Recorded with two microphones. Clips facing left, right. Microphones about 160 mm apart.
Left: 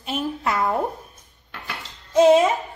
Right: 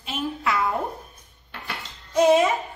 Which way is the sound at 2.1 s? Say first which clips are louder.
Left 3 dB; 25° left (ahead or behind).